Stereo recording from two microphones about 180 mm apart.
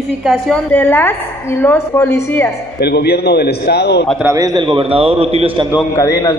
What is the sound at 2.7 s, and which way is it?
A man's voice, 65° left (ahead or behind).